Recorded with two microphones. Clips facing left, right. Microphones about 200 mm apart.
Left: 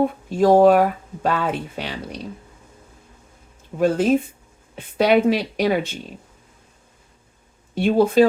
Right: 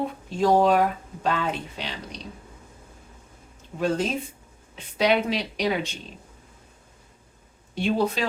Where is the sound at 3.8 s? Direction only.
55° left (ahead or behind).